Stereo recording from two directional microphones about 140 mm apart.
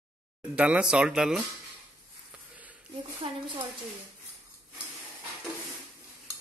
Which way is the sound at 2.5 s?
10° right (ahead or behind).